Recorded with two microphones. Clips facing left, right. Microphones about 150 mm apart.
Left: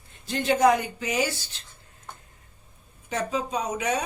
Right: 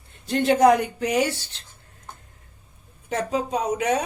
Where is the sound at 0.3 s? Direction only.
60° right (ahead or behind).